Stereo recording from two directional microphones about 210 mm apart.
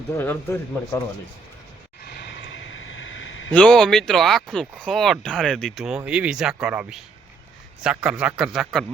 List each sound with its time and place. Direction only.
0.1 s speech: 10° left (ahead or behind)
2.0 s a sound: 55° left (ahead or behind)
3.5 s speech: 5° left (ahead or behind)